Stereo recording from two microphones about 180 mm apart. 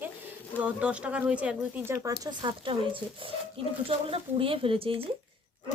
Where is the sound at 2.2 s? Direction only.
30° right (ahead or behind).